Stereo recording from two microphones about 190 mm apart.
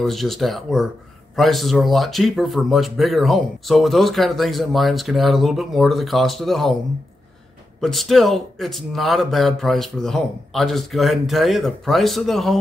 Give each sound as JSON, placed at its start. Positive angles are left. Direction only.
{"t": 0.0, "sound": "speech", "side_deg": 0}
{"t": 7.8, "sound": "speech", "side_deg": 0}